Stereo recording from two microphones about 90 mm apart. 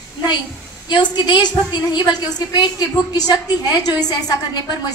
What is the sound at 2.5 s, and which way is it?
A woman's voice, 50° left (ahead or behind).